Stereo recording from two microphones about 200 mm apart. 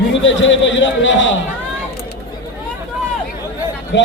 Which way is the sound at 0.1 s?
65° left (ahead or behind).